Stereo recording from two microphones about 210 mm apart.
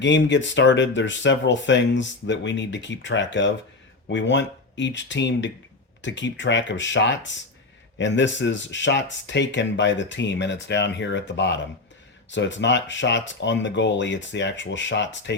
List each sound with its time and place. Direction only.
0.0 s speech: 60° left (ahead or behind)